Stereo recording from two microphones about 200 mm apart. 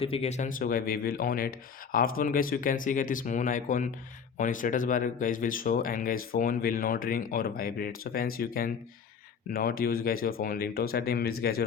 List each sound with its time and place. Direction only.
0.0 s speech: 30° left (ahead or behind); by 11.6 s 50° left (ahead or behind)